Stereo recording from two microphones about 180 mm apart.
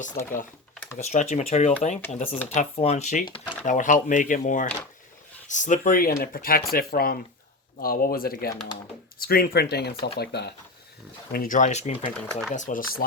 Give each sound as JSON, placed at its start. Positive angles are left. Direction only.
{"t": 0.2, "sound": "speech", "side_deg": 50}
{"t": 0.9, "sound": "speech", "side_deg": 40}
{"t": 11.3, "sound": "speech", "side_deg": 55}